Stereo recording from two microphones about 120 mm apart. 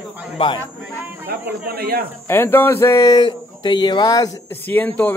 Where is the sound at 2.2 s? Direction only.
20° left (ahead or behind).